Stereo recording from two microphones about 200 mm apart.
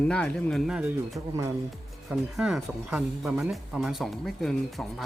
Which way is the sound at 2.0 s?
Centre (ahead or behind).